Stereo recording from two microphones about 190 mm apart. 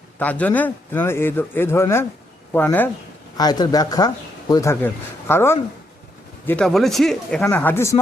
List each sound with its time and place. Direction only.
0.2 s a man's voice: 10° left (ahead or behind)
3.3 s a man's voice: 20° left (ahead or behind)